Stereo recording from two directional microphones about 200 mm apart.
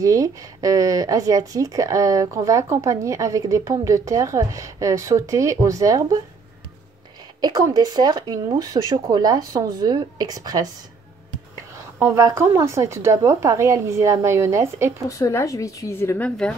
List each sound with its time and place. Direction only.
0.0 s speech: 15° right (ahead or behind)
7.4 s speech: 20° right (ahead or behind)
12.0 s speech: 15° right (ahead or behind)
15.0 s a woman's voice: 15° left (ahead or behind)